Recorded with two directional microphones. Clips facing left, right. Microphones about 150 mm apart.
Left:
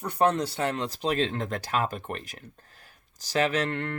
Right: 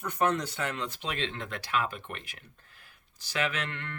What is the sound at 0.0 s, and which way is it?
Speech, 35° left (ahead or behind).